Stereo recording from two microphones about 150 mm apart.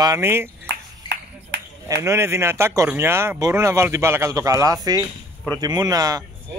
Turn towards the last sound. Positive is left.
turn(degrees=-25)  # may be behind; listen again after turning